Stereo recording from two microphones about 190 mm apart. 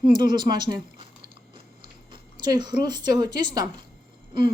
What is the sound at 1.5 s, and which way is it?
Chewing, 25° right (ahead or behind).